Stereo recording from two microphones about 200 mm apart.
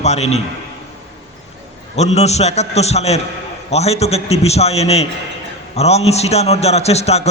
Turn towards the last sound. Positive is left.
turn(degrees=30)  # may be behind; listen again after turning